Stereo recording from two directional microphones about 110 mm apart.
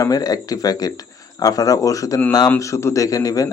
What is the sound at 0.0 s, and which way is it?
A man's voice, 35° left (ahead or behind).